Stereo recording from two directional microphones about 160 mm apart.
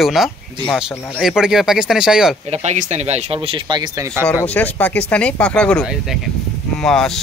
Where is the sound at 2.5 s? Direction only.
45° right (ahead or behind); by 4.1 s 25° right (ahead or behind).